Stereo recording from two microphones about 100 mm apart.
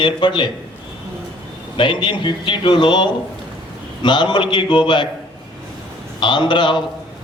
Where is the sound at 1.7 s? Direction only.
55° left (ahead or behind).